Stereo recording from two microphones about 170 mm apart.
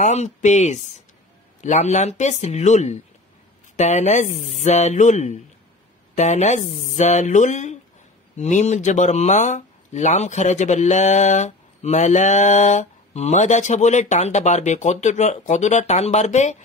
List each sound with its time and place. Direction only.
0.0 s speech: 45° left (ahead or behind)